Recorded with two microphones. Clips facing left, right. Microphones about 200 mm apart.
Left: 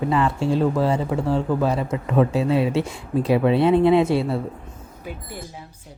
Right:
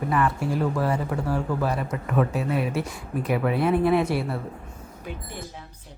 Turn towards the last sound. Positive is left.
turn(degrees=25)  # may be behind; listen again after turning